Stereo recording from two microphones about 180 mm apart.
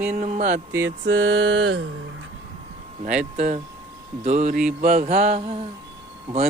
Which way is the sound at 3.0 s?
45° right (ahead or behind).